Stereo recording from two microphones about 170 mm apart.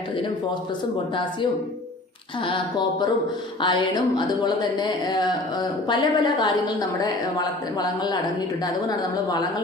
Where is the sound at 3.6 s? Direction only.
30° left (ahead or behind).